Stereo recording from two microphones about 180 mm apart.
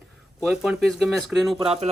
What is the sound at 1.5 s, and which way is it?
Speech, 35° right (ahead or behind).